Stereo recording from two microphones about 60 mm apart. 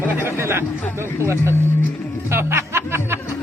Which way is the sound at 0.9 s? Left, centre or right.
Right.